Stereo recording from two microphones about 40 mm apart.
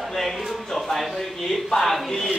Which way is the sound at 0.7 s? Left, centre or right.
Centre.